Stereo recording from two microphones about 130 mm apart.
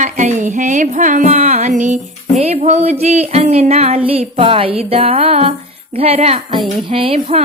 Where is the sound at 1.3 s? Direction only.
55° right (ahead or behind).